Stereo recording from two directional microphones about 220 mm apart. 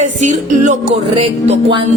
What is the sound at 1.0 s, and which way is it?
Speech, 25° right (ahead or behind).